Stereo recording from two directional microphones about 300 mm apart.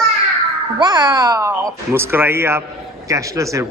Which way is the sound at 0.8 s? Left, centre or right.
Centre.